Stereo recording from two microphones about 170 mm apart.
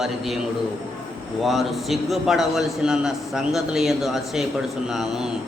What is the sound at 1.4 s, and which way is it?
A man's voice, centre (ahead or behind).